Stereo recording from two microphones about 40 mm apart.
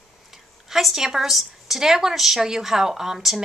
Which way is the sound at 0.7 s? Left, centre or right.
Centre.